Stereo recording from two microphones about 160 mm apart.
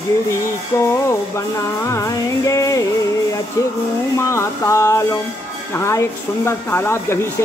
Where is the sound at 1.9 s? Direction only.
20° left (ahead or behind).